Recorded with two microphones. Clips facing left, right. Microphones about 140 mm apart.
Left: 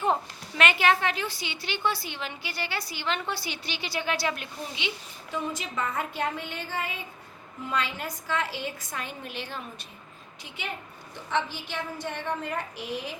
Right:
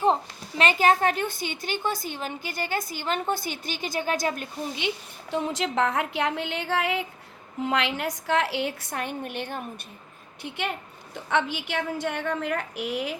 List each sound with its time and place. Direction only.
0.0 s a woman's voice: 30° right (ahead or behind)
5.3 s a woman's voice: 75° right (ahead or behind); by 9.8 s 55° right (ahead or behind)
11.3 s a woman's voice: 90° right